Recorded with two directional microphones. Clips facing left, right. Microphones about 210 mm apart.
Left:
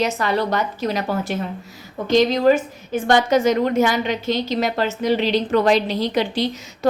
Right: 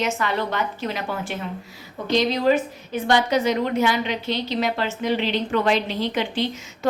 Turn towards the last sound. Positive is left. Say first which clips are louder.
# left 3 dB
turn(degrees=35)  # may be behind; listen again after turning